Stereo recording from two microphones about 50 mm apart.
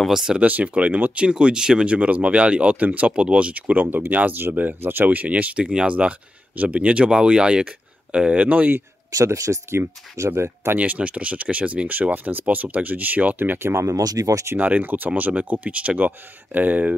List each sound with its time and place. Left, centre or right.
0.1 s speech: centre
0.4 s speech: right
3.8 s speech: right
5.6 s speech: centre
9.2 s speech: right
10.8 s speech: right
13.8 s speech: right
14.6 s speech: right